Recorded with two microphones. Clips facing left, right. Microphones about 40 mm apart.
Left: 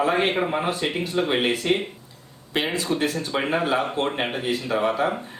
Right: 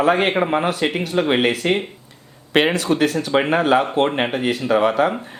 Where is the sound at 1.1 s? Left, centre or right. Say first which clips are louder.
Right 4 dB; right.